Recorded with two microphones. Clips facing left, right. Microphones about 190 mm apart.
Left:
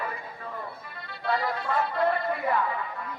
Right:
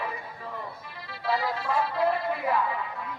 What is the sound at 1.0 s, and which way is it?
Music, 5° right (ahead or behind).